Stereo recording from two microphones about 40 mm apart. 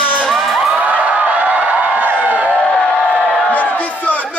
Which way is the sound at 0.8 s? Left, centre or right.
Right.